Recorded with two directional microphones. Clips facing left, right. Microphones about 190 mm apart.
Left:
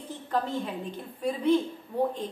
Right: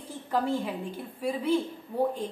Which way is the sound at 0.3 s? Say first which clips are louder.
Right 2 dB; 10° right (ahead or behind).